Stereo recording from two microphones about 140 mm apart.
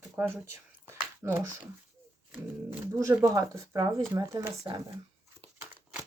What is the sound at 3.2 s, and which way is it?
Speech, 25° right (ahead or behind).